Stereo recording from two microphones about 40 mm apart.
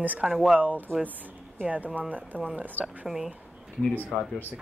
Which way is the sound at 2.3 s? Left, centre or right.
Left.